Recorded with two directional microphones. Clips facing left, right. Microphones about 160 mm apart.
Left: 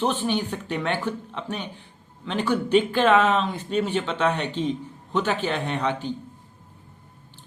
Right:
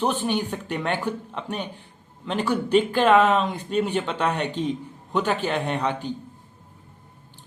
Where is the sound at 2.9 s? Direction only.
10° right (ahead or behind).